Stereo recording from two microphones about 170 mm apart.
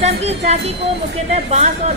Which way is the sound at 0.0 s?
40° right (ahead or behind).